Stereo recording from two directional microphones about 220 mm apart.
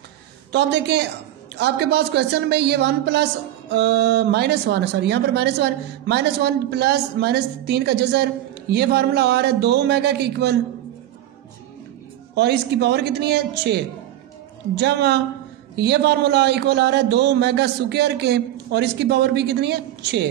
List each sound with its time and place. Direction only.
0.5 s a woman's voice: 50° right (ahead or behind)
12.4 s a woman's voice: 50° right (ahead or behind)
14.8 s a woman's voice: 50° right (ahead or behind)